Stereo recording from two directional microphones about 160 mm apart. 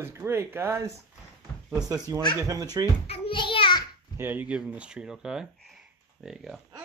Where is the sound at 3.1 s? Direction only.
30° left (ahead or behind).